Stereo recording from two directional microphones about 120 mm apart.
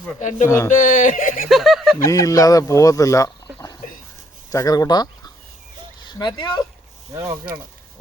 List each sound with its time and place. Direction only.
0.2 s speech: 90° left
0.4 s speech: 25° left (ahead or behind)
0.7 s speech: 90° left
1.5 s speech: centre (ahead or behind)
2.0 s speech: 25° left (ahead or behind)
4.5 s speech: 30° left (ahead or behind)
7.1 s speech: 25° right (ahead or behind)